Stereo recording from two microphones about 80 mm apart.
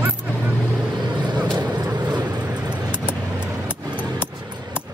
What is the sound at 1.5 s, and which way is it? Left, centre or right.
Vehicle, right.